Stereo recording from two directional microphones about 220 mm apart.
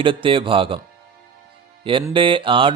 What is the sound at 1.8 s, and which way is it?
Speech, 25° right (ahead or behind).